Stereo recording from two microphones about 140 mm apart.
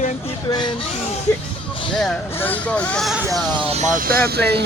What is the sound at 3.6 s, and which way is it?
Speech, 50° right (ahead or behind).